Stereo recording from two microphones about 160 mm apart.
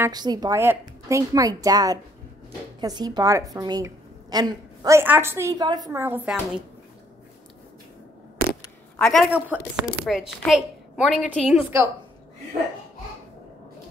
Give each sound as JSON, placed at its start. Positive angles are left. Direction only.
{"t": 0.0, "sound": "a woman's voice", "side_deg": -25}
{"t": 8.9, "sound": "a sound", "side_deg": 5}
{"t": 9.3, "sound": "a woman's voice", "side_deg": -5}